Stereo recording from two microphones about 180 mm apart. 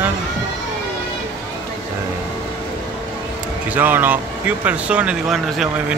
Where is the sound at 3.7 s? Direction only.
10° right (ahead or behind).